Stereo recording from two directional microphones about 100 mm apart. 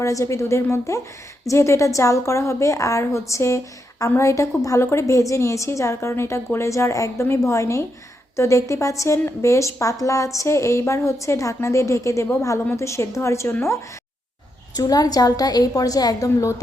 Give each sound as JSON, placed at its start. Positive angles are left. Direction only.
{"t": 0.0, "sound": "a woman's voice", "side_deg": 30}
{"t": 14.8, "sound": "a woman's voice", "side_deg": 40}